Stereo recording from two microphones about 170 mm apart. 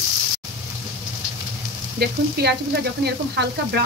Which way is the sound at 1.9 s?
70° right (ahead or behind).